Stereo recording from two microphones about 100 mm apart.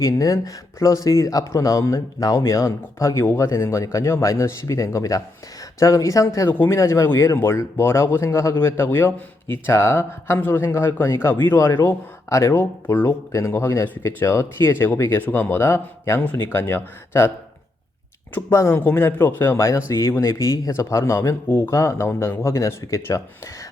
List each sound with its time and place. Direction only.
0.0 s speech: 35° left (ahead or behind)
18.5 s speech: 25° left (ahead or behind)